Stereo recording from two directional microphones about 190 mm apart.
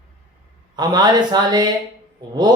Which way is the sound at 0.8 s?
20° right (ahead or behind).